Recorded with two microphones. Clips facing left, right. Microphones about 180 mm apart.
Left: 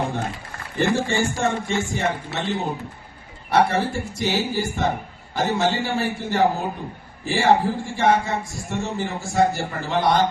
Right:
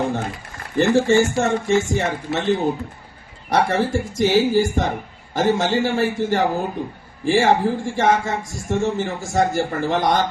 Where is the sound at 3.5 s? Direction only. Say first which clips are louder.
Right 1 dB; 45° right (ahead or behind).